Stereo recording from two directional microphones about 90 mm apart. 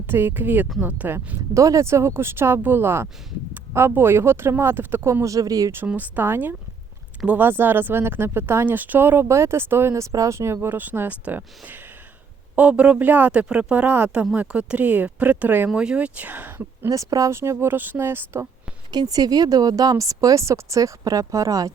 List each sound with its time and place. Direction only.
0.1 s speech: 25° right (ahead or behind)
1.5 s speech: 35° right (ahead or behind)
5.2 s speech: 40° right (ahead or behind)
5.9 s speech: 20° right (ahead or behind)
16.9 s speech: 40° right (ahead or behind)
18.9 s speech: 50° right (ahead or behind)